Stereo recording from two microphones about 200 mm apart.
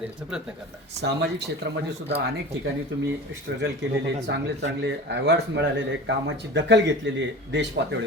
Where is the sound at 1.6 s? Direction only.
55° right (ahead or behind).